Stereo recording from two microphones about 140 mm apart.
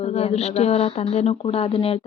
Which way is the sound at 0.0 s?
50° left (ahead or behind).